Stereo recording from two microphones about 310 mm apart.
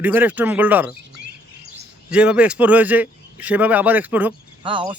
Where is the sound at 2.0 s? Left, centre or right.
Centre.